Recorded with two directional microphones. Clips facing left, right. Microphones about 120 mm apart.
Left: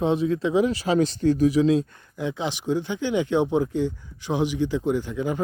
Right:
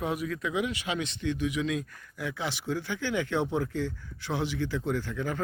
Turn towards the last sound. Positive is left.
turn(degrees=20)  # may be behind; listen again after turning